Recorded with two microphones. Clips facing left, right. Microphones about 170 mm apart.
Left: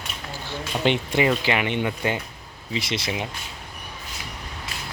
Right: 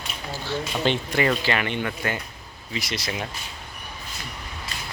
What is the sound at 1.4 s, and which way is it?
Speech, 15° left (ahead or behind).